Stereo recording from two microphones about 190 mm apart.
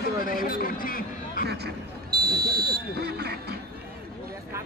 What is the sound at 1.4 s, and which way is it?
Speech, 60° right (ahead or behind).